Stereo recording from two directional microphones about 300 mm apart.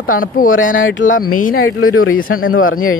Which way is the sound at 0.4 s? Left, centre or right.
Left.